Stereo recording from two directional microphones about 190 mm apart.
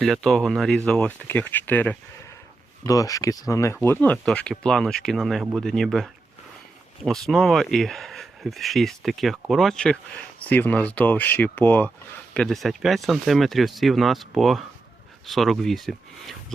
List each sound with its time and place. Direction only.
0.0 s speech: centre (ahead or behind)